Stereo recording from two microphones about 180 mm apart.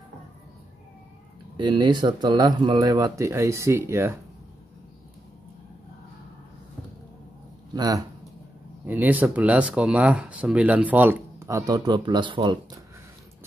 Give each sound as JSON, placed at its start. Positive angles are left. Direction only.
{"t": 1.6, "sound": "speech", "side_deg": -25}
{"t": 7.7, "sound": "speech", "side_deg": -20}
{"t": 8.8, "sound": "speech", "side_deg": -10}